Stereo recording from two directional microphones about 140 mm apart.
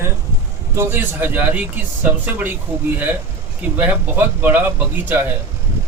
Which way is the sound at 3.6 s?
10° right (ahead or behind).